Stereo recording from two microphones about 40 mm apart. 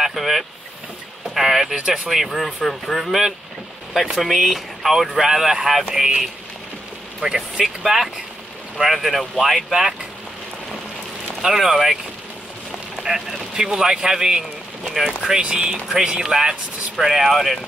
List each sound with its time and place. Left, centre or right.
0.0 s speech: centre
1.3 s vehicle: centre
2.0 s speech: centre
7.2 s speech: centre
11.4 s speech: centre
13.0 s speech: centre
15.2 s speech: right